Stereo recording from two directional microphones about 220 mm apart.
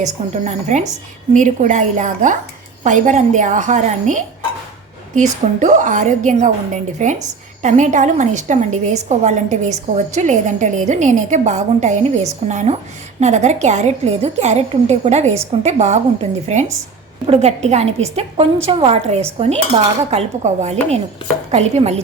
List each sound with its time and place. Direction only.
0.0 s a woman's voice: 35° right (ahead or behind)